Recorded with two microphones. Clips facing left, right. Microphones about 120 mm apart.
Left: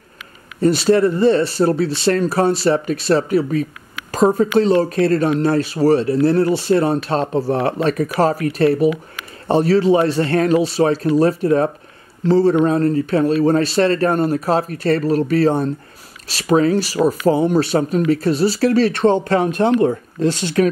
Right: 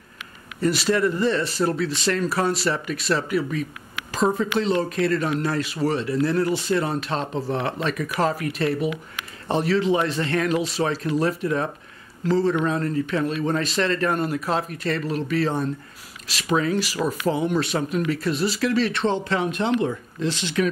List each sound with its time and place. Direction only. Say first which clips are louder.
0.6 s speech: left 7 dB; 30° left (ahead or behind)